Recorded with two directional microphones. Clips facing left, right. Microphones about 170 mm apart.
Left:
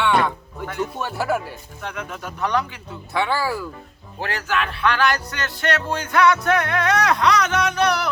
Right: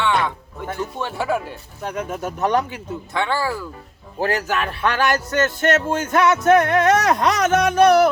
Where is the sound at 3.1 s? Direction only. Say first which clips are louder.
Left 1 dB; 10° left (ahead or behind).